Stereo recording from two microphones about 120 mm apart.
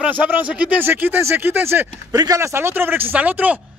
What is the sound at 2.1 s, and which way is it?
Speech, 30° right (ahead or behind).